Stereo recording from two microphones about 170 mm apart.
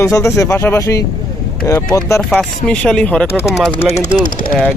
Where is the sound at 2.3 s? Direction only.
5° left (ahead or behind).